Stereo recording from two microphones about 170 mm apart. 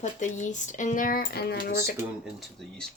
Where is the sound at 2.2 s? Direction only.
Centre (ahead or behind).